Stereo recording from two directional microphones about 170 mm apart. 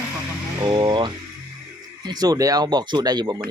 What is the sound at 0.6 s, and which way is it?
Speech, 25° right (ahead or behind).